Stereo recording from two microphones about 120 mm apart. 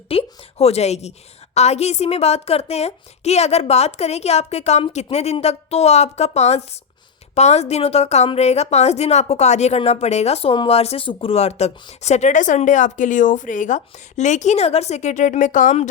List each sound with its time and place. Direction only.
0.1 s a woman's voice: 55° left (ahead or behind); by 15.9 s 75° left (ahead or behind)